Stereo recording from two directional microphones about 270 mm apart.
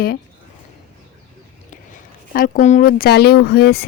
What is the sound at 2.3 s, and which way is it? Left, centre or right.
Speech, left.